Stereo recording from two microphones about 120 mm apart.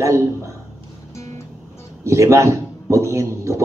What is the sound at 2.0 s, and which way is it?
A man's voice, 25° right (ahead or behind).